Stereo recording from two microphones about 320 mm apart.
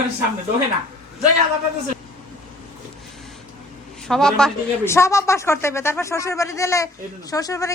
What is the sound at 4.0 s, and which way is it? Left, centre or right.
A woman's voice, centre.